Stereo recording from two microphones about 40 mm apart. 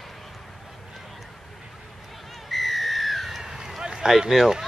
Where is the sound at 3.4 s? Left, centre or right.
Centre.